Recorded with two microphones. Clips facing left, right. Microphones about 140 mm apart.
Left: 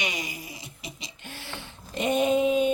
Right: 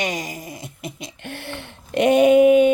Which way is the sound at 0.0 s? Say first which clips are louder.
Right 7 dB; 45° right (ahead or behind).